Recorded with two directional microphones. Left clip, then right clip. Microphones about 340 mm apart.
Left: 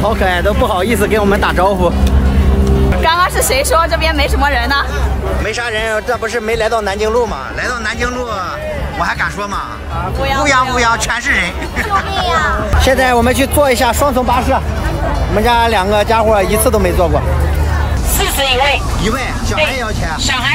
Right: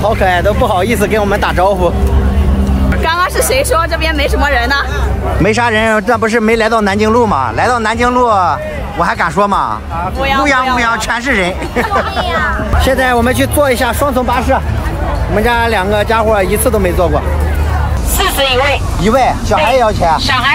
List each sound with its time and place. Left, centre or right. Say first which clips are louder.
0.0 s speech: right 2 dB; centre
3.0 s speech: even; centre
5.4 s a man's voice: right 8 dB; centre
7.5 s speech: right 6 dB; centre
12.3 s speech: left 1 dB; centre
18.2 s speech: right 2 dB; centre